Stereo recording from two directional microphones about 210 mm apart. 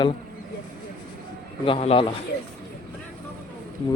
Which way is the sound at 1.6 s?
25° left (ahead or behind).